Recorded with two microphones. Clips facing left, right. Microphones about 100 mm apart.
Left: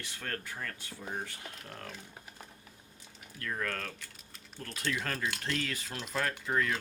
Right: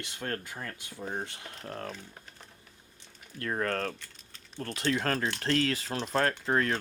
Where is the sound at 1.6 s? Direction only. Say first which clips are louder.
Right 10 dB; 35° right (ahead or behind).